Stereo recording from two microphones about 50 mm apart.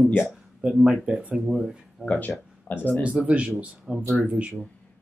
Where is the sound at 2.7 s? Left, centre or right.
Left.